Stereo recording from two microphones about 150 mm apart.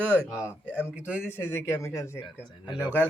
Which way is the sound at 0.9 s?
10° right (ahead or behind).